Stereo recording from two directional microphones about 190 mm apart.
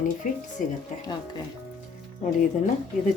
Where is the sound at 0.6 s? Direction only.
45° left (ahead or behind).